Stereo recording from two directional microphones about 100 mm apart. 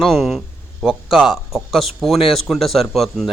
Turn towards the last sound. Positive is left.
turn(degrees=0)  # may be behind; listen again after turning